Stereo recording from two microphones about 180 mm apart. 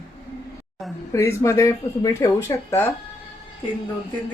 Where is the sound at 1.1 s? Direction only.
15° left (ahead or behind).